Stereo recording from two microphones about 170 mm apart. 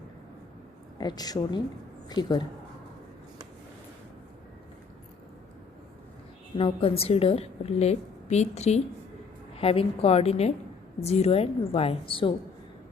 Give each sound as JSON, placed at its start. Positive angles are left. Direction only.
{"t": 0.9, "sound": "speech", "side_deg": 25}
{"t": 6.6, "sound": "a woman's voice", "side_deg": 35}